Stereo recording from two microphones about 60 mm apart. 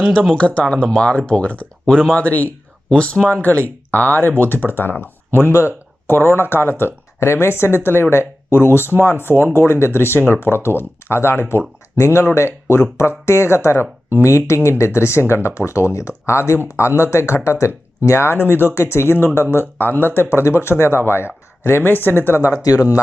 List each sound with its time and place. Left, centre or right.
0.1 s speech: centre; by 18.3 s left
18.3 s speech: left
22.4 s speech: right
22.6 s speech: left